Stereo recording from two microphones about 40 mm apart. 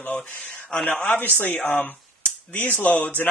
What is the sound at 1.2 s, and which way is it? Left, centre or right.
Speech, left.